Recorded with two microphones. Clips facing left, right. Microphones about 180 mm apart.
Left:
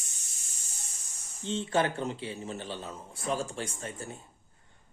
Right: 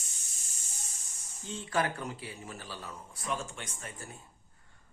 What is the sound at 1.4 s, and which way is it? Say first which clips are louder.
A man's voice: left 4 dB; 25° left (ahead or behind).